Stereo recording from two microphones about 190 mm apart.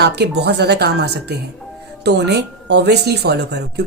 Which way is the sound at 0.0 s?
60° right (ahead or behind).